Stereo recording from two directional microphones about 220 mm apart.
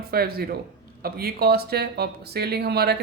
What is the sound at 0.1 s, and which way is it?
Speech, 45° right (ahead or behind).